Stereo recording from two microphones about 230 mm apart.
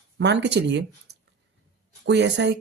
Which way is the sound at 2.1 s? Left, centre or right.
Right.